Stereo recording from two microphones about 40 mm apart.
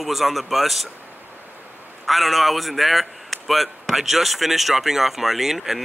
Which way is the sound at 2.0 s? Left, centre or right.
Centre.